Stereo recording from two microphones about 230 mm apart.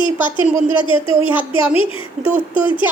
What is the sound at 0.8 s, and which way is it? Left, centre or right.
Speech, left.